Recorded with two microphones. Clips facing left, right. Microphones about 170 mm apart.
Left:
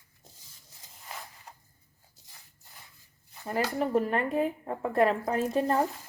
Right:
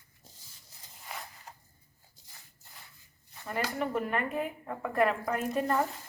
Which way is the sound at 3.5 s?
35° left (ahead or behind).